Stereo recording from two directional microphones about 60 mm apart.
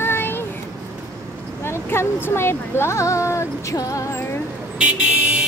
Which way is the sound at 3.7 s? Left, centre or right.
Left.